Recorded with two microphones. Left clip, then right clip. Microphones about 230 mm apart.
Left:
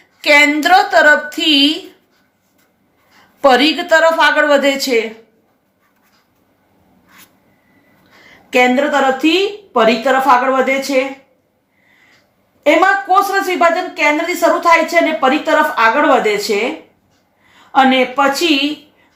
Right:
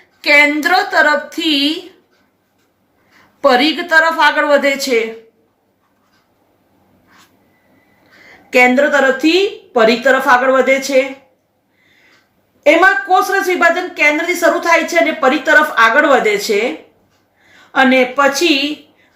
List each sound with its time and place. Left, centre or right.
0.2 s a woman's voice: centre
3.4 s a woman's voice: centre
8.4 s a woman's voice: centre
12.6 s a woman's voice: centre
17.7 s a woman's voice: centre